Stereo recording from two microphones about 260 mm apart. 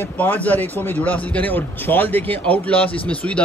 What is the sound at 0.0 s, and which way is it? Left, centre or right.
A man's voice, centre.